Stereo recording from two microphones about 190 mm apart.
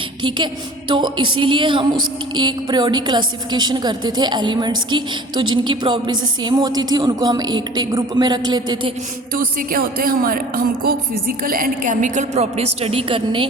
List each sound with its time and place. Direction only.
0.2 s a woman's voice: 25° right (ahead or behind)
9.3 s speech: 50° right (ahead or behind); by 13.5 s 25° right (ahead or behind)